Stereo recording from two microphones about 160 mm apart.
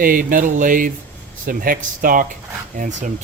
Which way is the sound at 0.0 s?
60° right (ahead or behind).